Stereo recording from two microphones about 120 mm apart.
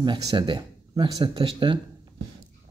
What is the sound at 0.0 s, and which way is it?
Speech, 35° right (ahead or behind).